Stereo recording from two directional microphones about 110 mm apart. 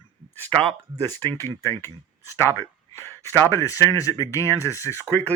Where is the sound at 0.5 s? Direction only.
55° right (ahead or behind).